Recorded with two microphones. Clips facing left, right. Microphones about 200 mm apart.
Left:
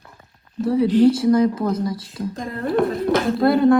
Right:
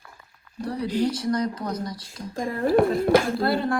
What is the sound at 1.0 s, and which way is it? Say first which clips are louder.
Speech: left 11 dB; 25° left (ahead or behind).